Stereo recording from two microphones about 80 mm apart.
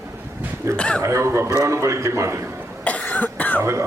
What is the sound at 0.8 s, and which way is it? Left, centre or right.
Speech, centre.